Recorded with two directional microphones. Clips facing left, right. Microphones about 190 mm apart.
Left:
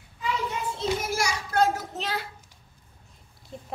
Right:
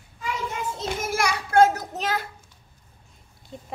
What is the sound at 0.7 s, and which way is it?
A child's voice, 50° right (ahead or behind).